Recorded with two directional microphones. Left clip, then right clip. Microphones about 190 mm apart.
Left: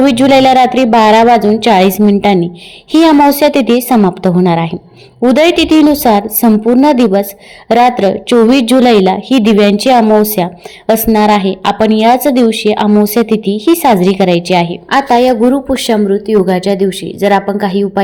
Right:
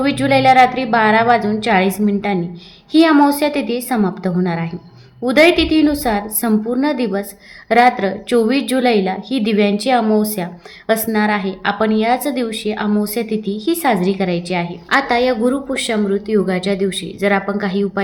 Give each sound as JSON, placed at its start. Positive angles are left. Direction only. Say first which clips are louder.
{"t": 0.0, "sound": "a woman's voice", "louder": "left 7 dB", "side_deg": 35}